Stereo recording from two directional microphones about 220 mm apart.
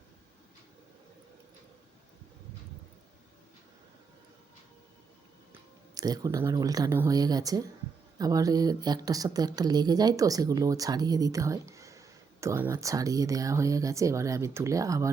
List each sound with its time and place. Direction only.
5.5 s a woman's voice: 15° right (ahead or behind)